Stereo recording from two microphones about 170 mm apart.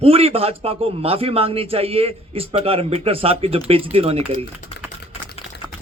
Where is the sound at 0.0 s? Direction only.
35° right (ahead or behind).